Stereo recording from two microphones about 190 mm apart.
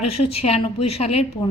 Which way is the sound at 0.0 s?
30° left (ahead or behind).